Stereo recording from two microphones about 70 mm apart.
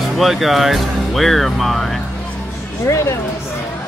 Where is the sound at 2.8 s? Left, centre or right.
Left.